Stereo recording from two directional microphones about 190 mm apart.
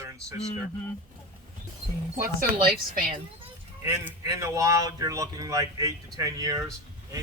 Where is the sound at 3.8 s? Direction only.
10° right (ahead or behind).